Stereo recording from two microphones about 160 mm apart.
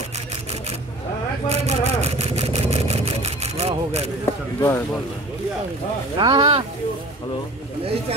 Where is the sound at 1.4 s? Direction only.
40° right (ahead or behind).